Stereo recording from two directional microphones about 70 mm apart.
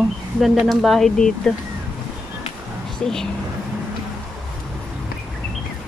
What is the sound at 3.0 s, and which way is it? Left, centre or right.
Speech, centre.